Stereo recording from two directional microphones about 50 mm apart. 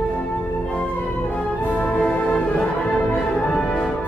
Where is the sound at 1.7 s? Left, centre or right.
Left.